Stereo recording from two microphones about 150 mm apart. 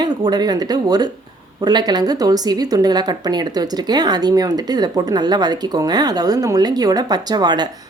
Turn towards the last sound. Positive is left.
turn(degrees=-25)  # may be behind; listen again after turning